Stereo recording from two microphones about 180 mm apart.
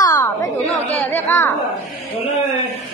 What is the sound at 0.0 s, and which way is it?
Chatter, 20° left (ahead or behind).